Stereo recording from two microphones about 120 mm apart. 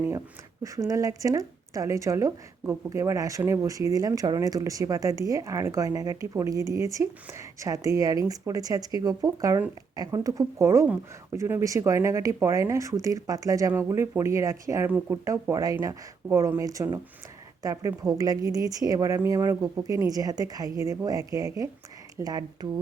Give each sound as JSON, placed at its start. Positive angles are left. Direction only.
{"t": 0.6, "sound": "speech", "side_deg": -25}
{"t": 14.8, "sound": "speech", "side_deg": -15}
{"t": 15.2, "sound": "speech", "side_deg": -25}